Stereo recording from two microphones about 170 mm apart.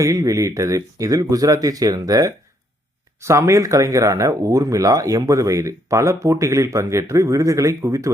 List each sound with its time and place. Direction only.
0.0 s speech: 20° right (ahead or behind)